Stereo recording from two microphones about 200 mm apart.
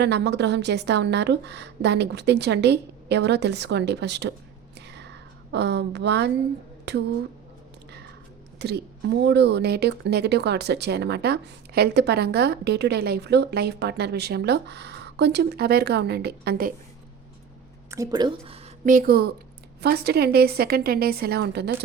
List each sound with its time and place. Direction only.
0.0 s a woman's voice: 60° right (ahead or behind)
5.5 s a woman's voice: 60° right (ahead or behind)
8.5 s a woman's voice: 55° right (ahead or behind)
17.9 s a woman's voice: 20° right (ahead or behind); by 21.8 s 55° right (ahead or behind)